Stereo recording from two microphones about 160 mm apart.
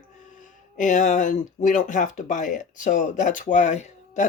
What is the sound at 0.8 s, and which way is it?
Speech, 55° left (ahead or behind).